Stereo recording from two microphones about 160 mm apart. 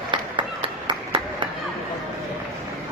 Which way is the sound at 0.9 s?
30° right (ahead or behind).